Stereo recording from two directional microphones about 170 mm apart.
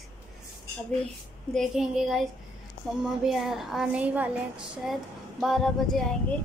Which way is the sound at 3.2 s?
Centre (ahead or behind).